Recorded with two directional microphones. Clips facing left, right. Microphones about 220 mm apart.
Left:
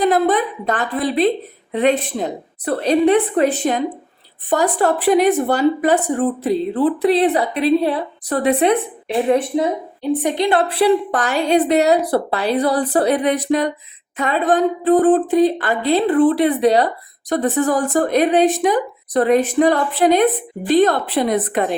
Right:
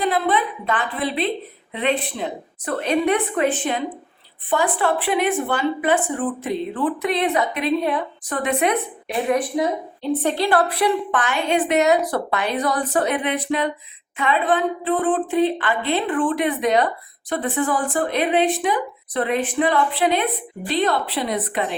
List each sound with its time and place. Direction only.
0.0 s a woman's voice: 45° left (ahead or behind); by 9.6 s 25° left (ahead or behind)
10.0 s a woman's voice: 15° left (ahead or behind); by 21.8 s 45° left (ahead or behind)